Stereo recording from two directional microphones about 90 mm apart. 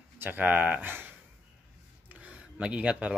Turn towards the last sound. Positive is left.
turn(degrees=-10)  # may be behind; listen again after turning